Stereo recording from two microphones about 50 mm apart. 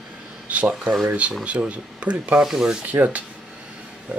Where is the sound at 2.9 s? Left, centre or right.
Right.